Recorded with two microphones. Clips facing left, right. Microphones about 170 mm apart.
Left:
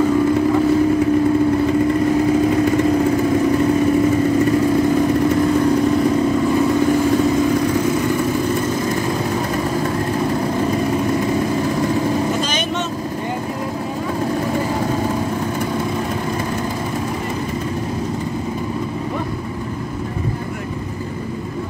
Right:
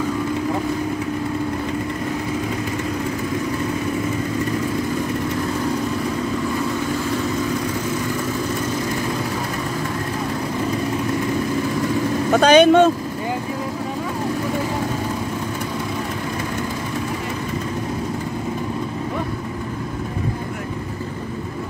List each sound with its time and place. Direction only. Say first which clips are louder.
12.3 s vehicle: right 9 dB; 65° right (ahead or behind)